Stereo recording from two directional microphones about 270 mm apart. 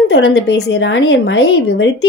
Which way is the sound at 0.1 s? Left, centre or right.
Left.